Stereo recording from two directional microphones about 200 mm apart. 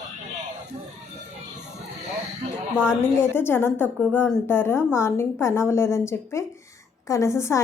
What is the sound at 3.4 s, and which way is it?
A woman's voice, 10° left (ahead or behind).